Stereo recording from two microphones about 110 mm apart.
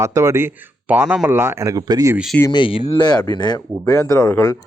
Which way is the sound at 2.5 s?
50° left (ahead or behind).